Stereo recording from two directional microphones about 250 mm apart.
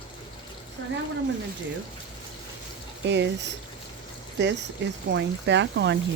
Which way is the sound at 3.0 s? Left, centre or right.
Right.